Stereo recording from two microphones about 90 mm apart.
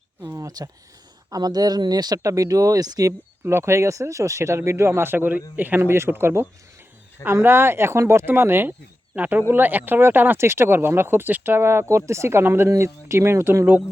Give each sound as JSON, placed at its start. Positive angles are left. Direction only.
{"t": 0.3, "sound": "a sound", "side_deg": -40}
{"t": 1.3, "sound": "speech", "side_deg": -45}
{"t": 3.1, "sound": "speech", "side_deg": -30}